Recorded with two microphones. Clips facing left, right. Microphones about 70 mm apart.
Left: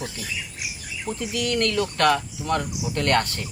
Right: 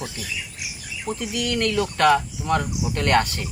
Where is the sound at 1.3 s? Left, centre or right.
Centre.